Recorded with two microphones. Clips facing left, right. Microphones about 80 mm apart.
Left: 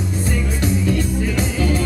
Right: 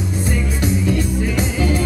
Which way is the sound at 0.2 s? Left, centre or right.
Centre.